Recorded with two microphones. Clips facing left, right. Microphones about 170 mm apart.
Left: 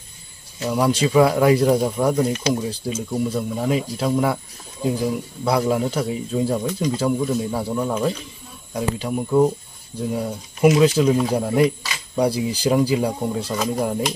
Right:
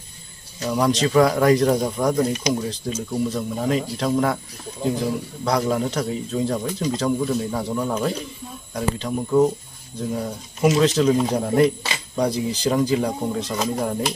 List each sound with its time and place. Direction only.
0.6 s speech: 5° left (ahead or behind)
5.4 s speech: 5° left (ahead or behind)